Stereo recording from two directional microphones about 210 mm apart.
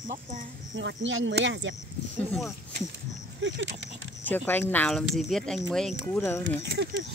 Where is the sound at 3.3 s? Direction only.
60° right (ahead or behind).